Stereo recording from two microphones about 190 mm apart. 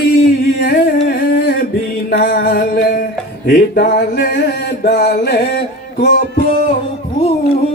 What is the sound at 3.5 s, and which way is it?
Mantra, 55° left (ahead or behind).